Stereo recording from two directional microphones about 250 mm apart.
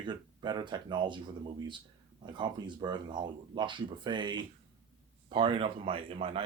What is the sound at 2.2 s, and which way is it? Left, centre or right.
Speech, centre.